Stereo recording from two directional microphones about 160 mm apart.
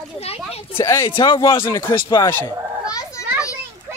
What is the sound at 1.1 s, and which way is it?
Speech, 30° left (ahead or behind).